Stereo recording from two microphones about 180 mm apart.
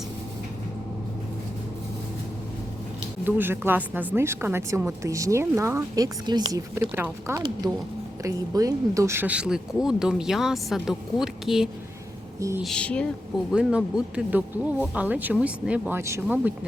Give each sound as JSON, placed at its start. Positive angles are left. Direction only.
{"t": 3.2, "sound": "speech", "side_deg": -10}
{"t": 12.4, "sound": "speech", "side_deg": -15}
{"t": 12.6, "sound": "speech", "side_deg": 5}
{"t": 13.5, "sound": "speech", "side_deg": -5}